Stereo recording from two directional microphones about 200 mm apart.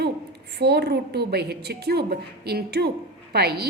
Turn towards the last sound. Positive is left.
turn(degrees=-50)  # may be behind; listen again after turning